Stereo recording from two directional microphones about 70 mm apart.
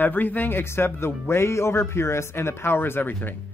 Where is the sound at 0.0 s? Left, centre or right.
Left.